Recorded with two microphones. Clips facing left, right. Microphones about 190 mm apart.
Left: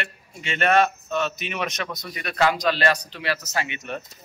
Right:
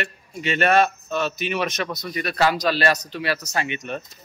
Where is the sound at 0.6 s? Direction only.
35° right (ahead or behind).